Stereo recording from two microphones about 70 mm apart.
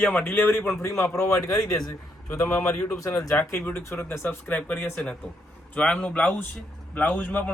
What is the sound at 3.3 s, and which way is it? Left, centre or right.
A man's voice, left.